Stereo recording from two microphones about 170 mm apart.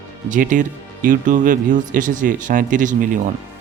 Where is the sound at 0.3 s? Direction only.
50° right (ahead or behind).